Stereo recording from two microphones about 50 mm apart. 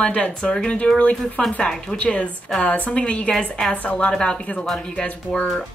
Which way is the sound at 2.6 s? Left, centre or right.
Left.